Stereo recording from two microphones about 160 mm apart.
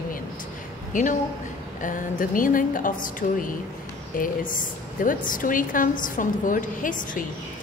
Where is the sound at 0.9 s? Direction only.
50° left (ahead or behind).